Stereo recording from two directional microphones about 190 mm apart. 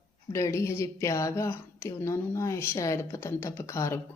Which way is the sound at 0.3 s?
15° left (ahead or behind).